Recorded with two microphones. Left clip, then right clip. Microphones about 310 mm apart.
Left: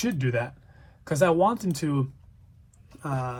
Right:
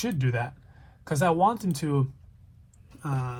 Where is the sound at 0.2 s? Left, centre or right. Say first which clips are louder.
Left 3 dB; centre.